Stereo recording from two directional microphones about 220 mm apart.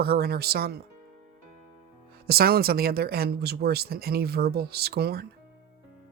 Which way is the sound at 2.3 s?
45° right (ahead or behind).